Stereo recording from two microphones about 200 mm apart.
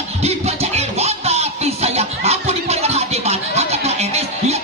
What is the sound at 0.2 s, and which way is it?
Music, 30° right (ahead or behind).